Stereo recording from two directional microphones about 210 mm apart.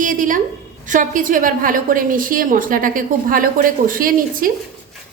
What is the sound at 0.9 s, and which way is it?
A woman's voice, 40° right (ahead or behind).